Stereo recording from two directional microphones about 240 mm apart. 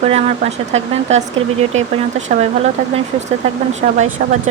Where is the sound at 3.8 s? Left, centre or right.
Right.